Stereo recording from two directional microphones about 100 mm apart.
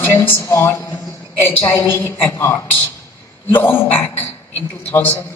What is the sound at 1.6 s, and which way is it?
Speech, 30° left (ahead or behind).